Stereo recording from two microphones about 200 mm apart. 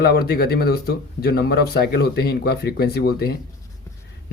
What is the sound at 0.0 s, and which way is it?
Speech, 50° left (ahead or behind).